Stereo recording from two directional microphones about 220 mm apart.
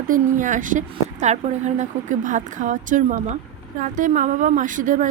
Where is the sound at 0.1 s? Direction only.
35° right (ahead or behind).